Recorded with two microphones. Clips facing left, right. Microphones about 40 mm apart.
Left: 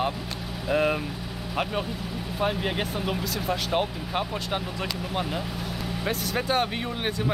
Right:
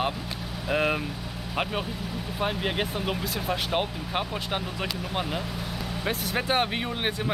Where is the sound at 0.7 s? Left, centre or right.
Centre.